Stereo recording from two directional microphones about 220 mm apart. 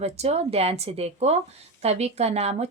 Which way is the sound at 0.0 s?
30° right (ahead or behind).